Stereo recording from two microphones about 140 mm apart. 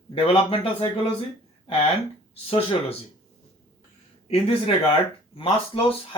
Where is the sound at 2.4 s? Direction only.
40° left (ahead or behind).